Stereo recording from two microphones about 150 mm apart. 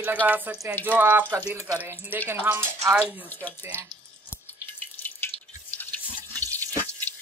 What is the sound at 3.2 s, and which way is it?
Speech, 10° left (ahead or behind).